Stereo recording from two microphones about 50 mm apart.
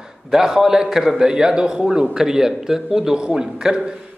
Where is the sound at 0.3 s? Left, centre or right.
Centre.